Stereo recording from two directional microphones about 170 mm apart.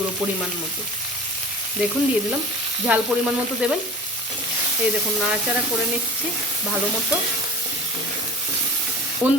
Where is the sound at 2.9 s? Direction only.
5° right (ahead or behind).